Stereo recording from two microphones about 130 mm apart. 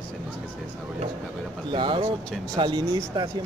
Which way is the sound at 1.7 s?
40° right (ahead or behind).